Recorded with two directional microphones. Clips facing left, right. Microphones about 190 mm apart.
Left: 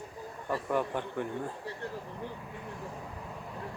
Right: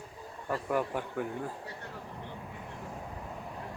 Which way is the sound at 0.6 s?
10° right (ahead or behind).